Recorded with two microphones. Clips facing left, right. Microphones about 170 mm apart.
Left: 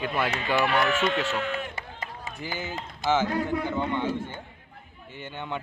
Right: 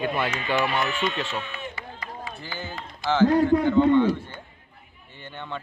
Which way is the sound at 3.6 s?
15° left (ahead or behind).